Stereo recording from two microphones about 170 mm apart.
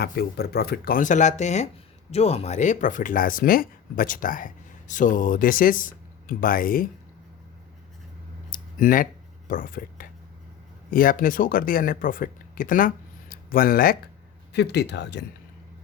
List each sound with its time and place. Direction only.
0.0 s speech: 70° left (ahead or behind)
8.4 s a sound: 55° left (ahead or behind)
9.5 s speech: 55° left (ahead or behind)
14.5 s speech: 80° left